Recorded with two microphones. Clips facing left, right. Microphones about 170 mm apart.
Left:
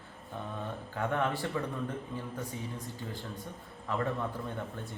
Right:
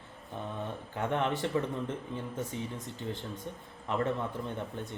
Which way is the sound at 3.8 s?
20° right (ahead or behind).